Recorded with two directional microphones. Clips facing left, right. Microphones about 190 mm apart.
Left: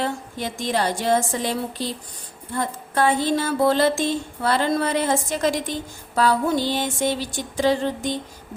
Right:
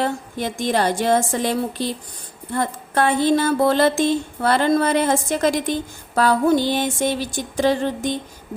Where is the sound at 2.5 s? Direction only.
60° right (ahead or behind).